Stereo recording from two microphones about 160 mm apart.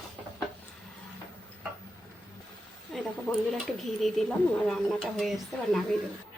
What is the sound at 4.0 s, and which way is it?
A woman's voice, centre (ahead or behind).